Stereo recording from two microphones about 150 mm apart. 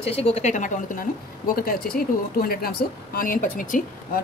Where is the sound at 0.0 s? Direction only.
40° left (ahead or behind); by 1.0 s 60° left (ahead or behind).